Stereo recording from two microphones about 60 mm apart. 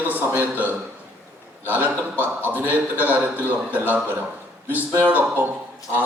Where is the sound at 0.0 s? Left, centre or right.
Right.